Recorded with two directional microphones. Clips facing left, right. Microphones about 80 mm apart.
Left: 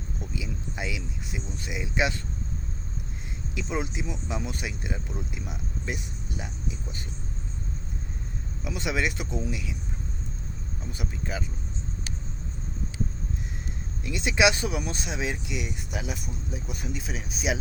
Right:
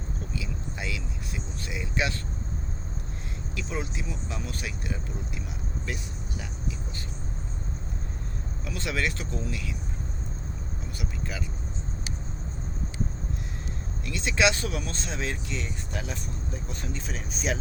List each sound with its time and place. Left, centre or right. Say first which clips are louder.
0.2 s speech: left 2 dB; centre
3.5 s speech: left 3 dB; centre
8.6 s speech: left 2 dB; centre
10.9 s speech: left 2 dB; left
14.0 s speech: left 2 dB; centre